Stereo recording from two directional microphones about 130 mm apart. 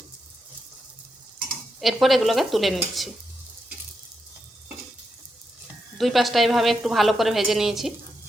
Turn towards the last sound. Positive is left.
turn(degrees=0)  # may be behind; listen again after turning